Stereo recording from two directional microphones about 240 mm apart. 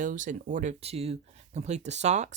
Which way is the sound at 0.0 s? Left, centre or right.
Right.